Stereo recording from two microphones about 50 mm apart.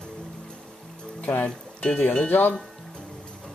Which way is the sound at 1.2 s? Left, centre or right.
Left.